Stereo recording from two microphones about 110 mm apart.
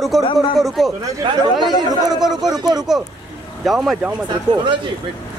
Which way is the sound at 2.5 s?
35° right (ahead or behind).